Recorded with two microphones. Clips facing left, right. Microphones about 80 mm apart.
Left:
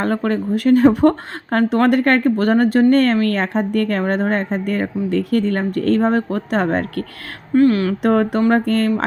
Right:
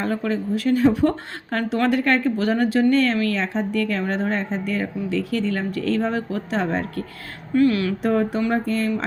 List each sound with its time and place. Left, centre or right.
0.0 s a woman's voice: left
7.5 s speech: left
8.0 s speech: left